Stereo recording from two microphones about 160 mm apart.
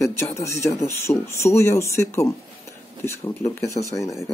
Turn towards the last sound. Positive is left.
turn(degrees=20)  # may be behind; listen again after turning